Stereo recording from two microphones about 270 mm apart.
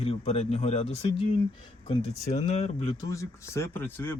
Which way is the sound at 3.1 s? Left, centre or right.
Centre.